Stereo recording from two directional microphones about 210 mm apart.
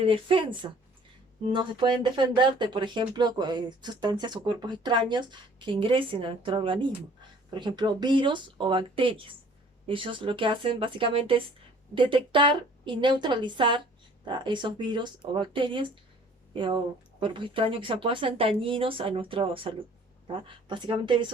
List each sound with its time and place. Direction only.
0.0 s speech: 25° right (ahead or behind)